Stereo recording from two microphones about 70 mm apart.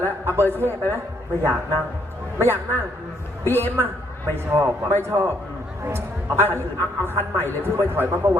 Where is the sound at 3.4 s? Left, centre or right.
Left.